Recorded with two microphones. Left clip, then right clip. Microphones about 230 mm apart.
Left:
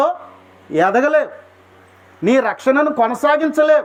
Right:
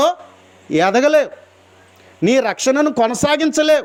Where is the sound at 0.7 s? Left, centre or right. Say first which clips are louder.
Right 1 dB; right.